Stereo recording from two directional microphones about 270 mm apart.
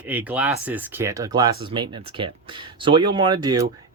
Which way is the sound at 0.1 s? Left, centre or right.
Centre.